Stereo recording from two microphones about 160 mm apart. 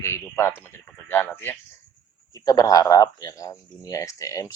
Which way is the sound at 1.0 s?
10° left (ahead or behind).